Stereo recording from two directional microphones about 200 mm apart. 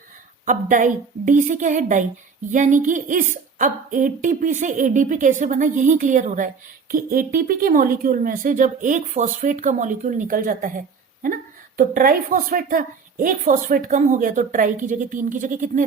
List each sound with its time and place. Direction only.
0.4 s a woman's voice: 40° right (ahead or behind)